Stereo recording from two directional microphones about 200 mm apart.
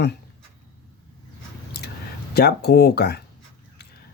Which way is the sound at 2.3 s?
55° left (ahead or behind).